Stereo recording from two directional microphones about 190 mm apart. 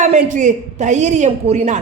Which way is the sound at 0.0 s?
40° right (ahead or behind).